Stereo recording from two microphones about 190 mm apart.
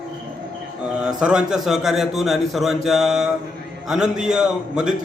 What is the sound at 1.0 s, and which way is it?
A man's voice, 5° right (ahead or behind).